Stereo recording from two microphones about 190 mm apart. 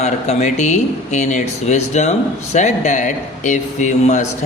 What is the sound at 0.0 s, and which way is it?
Speech, 35° left (ahead or behind).